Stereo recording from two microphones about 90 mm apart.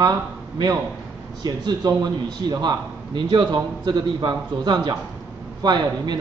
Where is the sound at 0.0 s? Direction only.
45° right (ahead or behind).